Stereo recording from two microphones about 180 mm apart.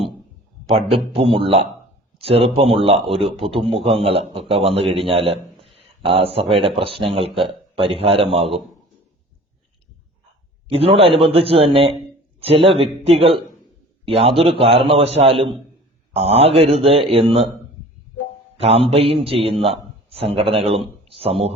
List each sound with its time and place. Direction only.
0.7 s a man's voice: 30° right (ahead or behind)
10.7 s a man's voice: 30° right (ahead or behind)
18.5 s a man's voice: 30° right (ahead or behind)